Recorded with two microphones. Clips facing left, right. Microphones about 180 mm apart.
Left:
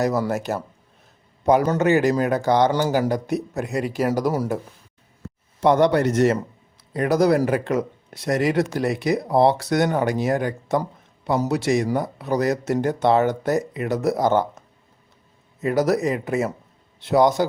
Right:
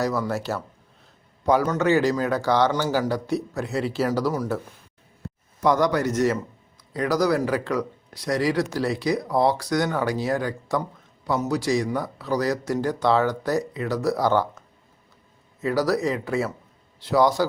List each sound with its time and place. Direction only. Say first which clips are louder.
0.3 s speech: left 2 dB; 20° left (ahead or behind)
1.8 s speech: left 2 dB; 20° left (ahead or behind)
5.5 s speech: left 4 dB; 25° left (ahead or behind)
15.6 s speech: left 2 dB; 20° left (ahead or behind)